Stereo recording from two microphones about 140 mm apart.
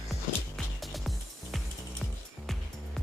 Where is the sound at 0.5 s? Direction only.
Centre (ahead or behind).